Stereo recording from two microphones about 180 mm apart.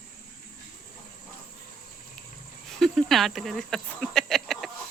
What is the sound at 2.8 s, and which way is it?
Speech, centre (ahead or behind).